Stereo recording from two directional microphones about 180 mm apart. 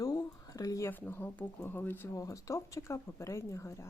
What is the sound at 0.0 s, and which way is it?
Speech, 20° left (ahead or behind).